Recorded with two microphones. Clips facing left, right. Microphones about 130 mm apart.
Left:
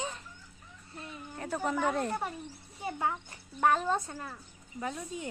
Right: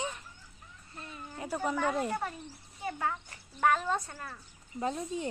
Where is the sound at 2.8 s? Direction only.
20° left (ahead or behind).